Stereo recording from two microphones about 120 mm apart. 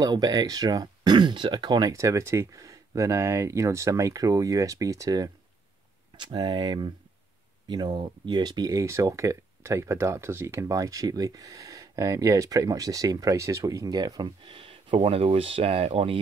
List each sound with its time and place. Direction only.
0.0 s speech: 35° right (ahead or behind); by 16.2 s 50° right (ahead or behind)